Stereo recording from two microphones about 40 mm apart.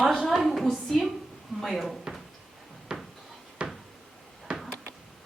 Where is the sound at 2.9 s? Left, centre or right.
Centre.